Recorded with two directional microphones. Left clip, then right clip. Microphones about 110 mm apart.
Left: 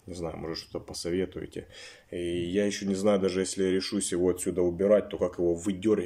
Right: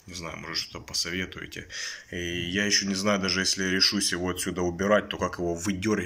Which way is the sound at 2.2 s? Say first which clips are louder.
Even; 35° left (ahead or behind).